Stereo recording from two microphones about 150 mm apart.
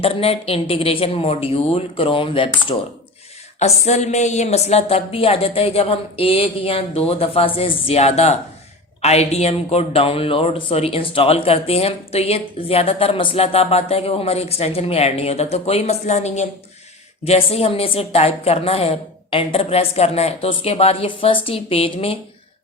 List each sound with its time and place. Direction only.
0.0 s a woman's voice: 40° left (ahead or behind)
3.6 s a woman's voice: 50° left (ahead or behind)